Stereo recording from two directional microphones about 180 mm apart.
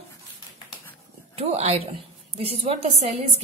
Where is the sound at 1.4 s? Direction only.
35° right (ahead or behind).